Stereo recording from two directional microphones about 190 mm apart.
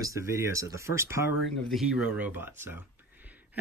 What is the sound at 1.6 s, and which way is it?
Speech, centre (ahead or behind).